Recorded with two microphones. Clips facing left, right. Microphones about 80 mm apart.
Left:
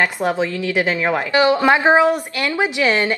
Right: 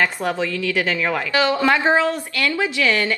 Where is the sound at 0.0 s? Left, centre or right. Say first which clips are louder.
Left 2 dB; left.